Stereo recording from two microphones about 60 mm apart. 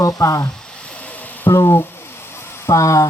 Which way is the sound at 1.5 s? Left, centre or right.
Left.